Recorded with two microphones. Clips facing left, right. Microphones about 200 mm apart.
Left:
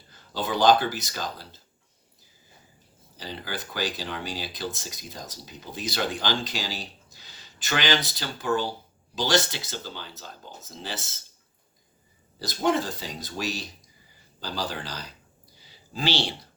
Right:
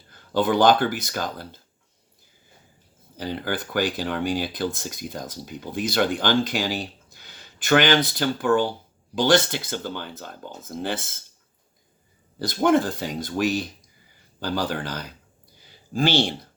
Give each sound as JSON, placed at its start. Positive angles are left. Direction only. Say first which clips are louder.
{"t": 0.1, "sound": "speech", "louder": "right 8 dB", "side_deg": -55}
{"t": 3.2, "sound": "speech", "louder": "right 7 dB", "side_deg": -55}
{"t": 12.4, "sound": "speech", "louder": "right 5 dB", "side_deg": -55}